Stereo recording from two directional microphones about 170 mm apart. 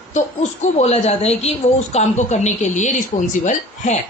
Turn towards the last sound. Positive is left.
turn(degrees=45)  # may be behind; listen again after turning